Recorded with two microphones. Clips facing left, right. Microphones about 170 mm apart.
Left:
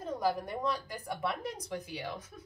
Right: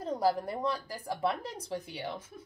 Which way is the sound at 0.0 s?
30° right (ahead or behind).